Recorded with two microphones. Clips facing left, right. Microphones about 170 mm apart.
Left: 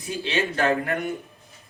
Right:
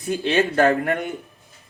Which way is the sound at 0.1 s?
55° right (ahead or behind).